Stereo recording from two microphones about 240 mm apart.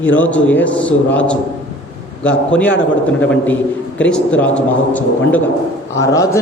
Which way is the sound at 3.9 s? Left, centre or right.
Centre.